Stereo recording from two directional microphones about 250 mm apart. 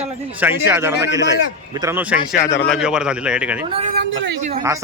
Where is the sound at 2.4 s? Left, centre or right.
Left.